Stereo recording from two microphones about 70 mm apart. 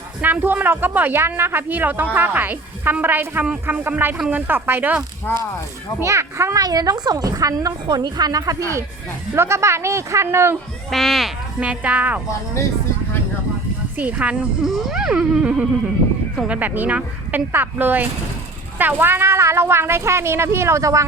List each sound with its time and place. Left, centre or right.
0.2 s speech: right
5.3 s speech: left
6.0 s a child's voice: right
6.6 s speech: right
9.3 s speech: right
10.9 s a sound: centre
11.6 s speech: centre
13.9 s speech: right
14.6 s a sound: centre
16.5 s speech: right